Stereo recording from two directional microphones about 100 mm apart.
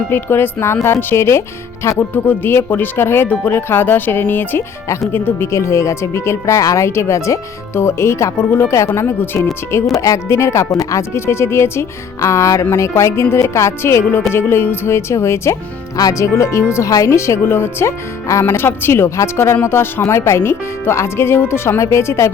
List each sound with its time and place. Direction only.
0.1 s speech: 20° left (ahead or behind)